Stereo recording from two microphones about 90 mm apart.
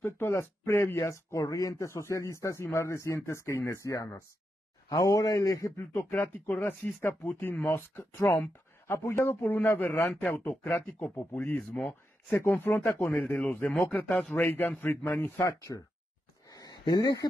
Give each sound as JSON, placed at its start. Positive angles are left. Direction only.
{"t": 0.0, "sound": "speech", "side_deg": 30}
{"t": 16.4, "sound": "a sound", "side_deg": 45}
{"t": 16.8, "sound": "speech", "side_deg": 50}